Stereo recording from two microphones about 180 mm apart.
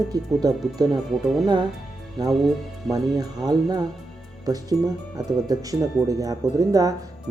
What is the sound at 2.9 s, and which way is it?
Speech, 20° right (ahead or behind).